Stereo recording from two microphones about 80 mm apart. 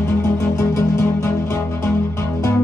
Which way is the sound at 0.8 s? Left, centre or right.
Left.